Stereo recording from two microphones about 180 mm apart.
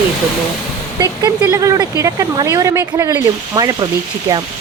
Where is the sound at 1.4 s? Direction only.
15° right (ahead or behind).